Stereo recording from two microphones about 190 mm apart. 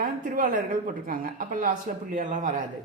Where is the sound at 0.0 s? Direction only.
45° right (ahead or behind).